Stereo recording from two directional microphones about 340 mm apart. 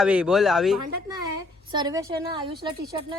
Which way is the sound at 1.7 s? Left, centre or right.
Centre.